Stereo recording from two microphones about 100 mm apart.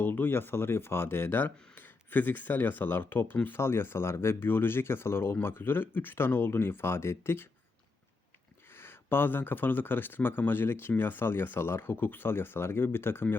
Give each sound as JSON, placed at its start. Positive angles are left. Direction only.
{"t": 0.0, "sound": "speech", "side_deg": 20}
{"t": 8.8, "sound": "speech", "side_deg": 20}